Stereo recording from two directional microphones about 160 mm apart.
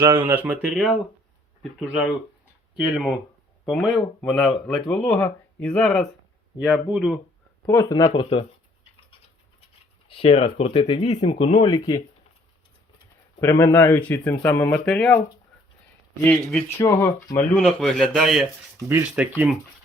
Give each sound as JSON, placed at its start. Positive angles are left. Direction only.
{"t": 0.0, "sound": "speech", "side_deg": -15}
{"t": 6.6, "sound": "speech", "side_deg": -10}
{"t": 7.7, "sound": "speech", "side_deg": 20}
{"t": 10.1, "sound": "speech", "side_deg": 35}
{"t": 13.4, "sound": "speech", "side_deg": 15}
{"t": 16.2, "sound": "speech", "side_deg": 10}
{"t": 16.7, "sound": "speech", "side_deg": 20}
{"t": 17.5, "sound": "speech", "side_deg": 5}